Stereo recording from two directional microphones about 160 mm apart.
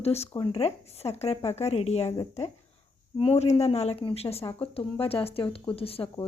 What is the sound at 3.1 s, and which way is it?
Speech, 40° left (ahead or behind).